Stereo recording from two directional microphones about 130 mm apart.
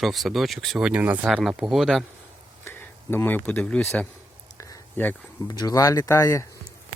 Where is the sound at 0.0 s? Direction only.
Centre (ahead or behind).